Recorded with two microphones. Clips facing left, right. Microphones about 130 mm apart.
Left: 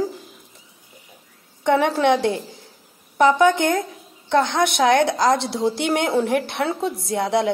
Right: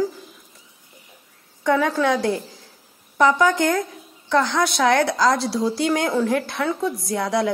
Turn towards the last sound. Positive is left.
turn(degrees=25)  # may be behind; listen again after turning